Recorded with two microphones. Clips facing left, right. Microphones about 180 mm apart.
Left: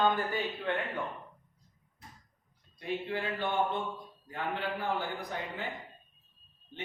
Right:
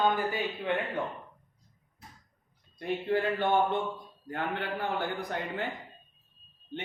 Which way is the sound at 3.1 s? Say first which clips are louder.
Right 10 dB; 50° right (ahead or behind).